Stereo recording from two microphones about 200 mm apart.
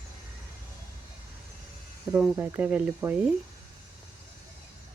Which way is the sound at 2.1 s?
5° right (ahead or behind).